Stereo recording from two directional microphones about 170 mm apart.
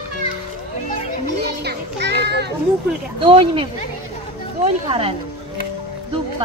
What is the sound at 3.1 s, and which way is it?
Speech, 30° right (ahead or behind).